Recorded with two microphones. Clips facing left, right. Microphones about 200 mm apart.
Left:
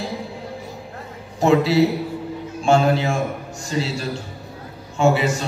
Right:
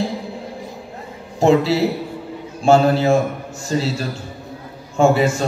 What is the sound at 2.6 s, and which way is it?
Speech, 35° right (ahead or behind).